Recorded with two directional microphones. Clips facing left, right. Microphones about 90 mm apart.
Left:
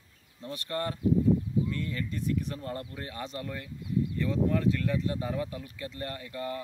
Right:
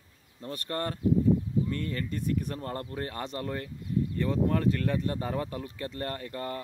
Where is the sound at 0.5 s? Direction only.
40° right (ahead or behind).